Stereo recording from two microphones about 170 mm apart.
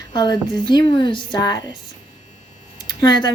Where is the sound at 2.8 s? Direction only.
25° left (ahead or behind).